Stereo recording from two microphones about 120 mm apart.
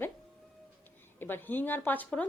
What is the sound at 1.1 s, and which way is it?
A woman's voice, 15° left (ahead or behind).